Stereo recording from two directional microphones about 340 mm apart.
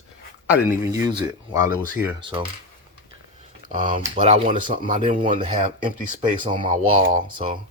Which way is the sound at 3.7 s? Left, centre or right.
Right.